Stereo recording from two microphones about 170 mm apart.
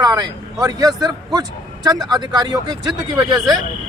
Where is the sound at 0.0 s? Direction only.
20° right (ahead or behind).